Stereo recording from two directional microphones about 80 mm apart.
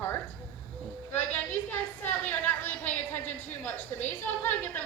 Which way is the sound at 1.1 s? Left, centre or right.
Left.